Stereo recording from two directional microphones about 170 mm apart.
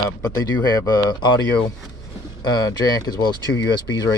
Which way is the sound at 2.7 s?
20° left (ahead or behind).